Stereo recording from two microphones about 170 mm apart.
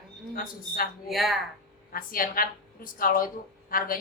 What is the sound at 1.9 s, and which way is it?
A woman's voice, 55° left (ahead or behind).